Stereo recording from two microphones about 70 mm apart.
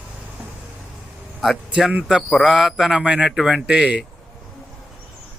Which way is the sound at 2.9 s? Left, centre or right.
Centre.